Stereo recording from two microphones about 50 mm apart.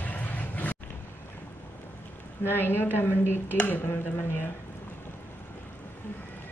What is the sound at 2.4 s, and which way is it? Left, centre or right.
A woman's voice, left.